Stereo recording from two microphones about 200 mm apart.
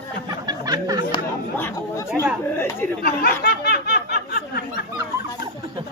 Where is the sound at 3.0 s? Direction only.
50° left (ahead or behind).